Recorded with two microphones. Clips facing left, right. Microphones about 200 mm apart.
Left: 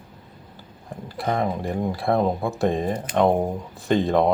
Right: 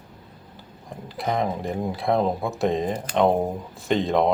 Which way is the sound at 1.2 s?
Centre (ahead or behind).